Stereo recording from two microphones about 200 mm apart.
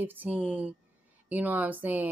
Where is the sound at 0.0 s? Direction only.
10° right (ahead or behind).